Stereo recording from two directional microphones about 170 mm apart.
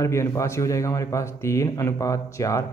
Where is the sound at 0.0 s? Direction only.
15° left (ahead or behind).